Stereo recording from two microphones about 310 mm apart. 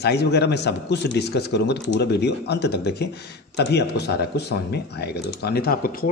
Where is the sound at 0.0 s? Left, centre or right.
Left.